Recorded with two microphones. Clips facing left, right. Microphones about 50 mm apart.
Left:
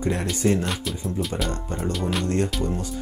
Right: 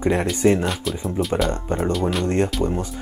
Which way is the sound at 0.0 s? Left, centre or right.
Right.